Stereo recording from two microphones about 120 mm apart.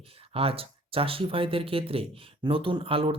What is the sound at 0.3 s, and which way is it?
Speech, 50° right (ahead or behind).